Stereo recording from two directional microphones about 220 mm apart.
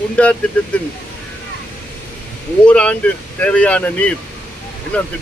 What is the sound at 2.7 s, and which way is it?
Speech, 5° left (ahead or behind).